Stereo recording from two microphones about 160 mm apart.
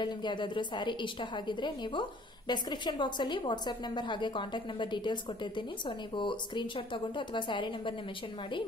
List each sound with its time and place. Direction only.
0.0 s a woman's voice: 30° left (ahead or behind)